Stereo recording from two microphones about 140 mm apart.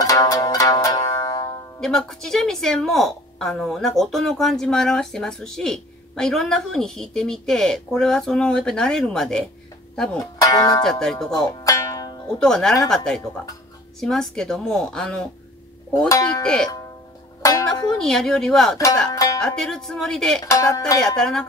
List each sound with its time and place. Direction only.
0.0 s music: 25° left (ahead or behind)
1.8 s a woman's voice: centre (ahead or behind)
10.4 s speech: 25° left (ahead or behind)
10.8 s a woman's voice: 5° left (ahead or behind)
11.6 s music: 25° left (ahead or behind)
12.3 s a woman's voice: 5° left (ahead or behind)
16.1 s speech: 25° left (ahead or behind)
17.4 s zither: 25° left (ahead or behind)
17.9 s a woman's voice: 5° left (ahead or behind)
20.4 s speech: 25° left (ahead or behind)
21.0 s a woman's voice: 5° left (ahead or behind)